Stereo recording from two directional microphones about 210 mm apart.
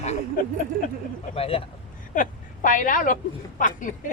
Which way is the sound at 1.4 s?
25° left (ahead or behind).